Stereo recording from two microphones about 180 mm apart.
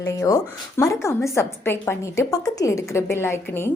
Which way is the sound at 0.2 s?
20° left (ahead or behind).